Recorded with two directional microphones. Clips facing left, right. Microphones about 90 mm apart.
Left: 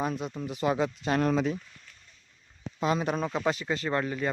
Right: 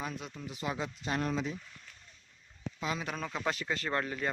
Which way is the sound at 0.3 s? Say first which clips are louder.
Left 10 dB; 60° left (ahead or behind).